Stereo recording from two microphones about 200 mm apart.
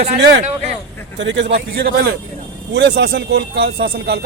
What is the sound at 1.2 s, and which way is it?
Speech, 60° right (ahead or behind).